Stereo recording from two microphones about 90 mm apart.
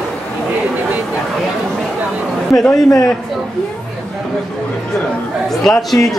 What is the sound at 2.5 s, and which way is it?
Speech, 5° left (ahead or behind).